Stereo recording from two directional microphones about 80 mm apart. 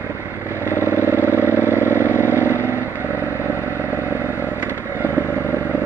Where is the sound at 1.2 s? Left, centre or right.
Left.